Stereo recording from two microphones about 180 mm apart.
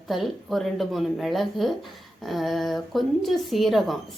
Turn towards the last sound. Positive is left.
turn(degrees=0)  # may be behind; listen again after turning